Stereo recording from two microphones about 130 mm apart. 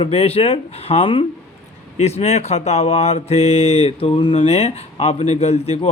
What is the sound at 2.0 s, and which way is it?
A man's voice, 55° left (ahead or behind).